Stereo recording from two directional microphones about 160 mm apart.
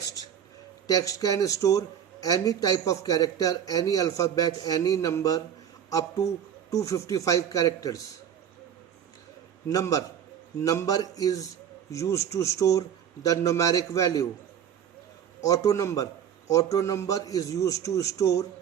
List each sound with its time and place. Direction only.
0.9 s a man's voice: 25° left (ahead or behind)
9.6 s a man's voice: 20° left (ahead or behind)
15.4 s a man's voice: 20° left (ahead or behind)